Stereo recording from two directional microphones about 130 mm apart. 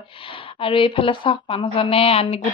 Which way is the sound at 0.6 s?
45° left (ahead or behind).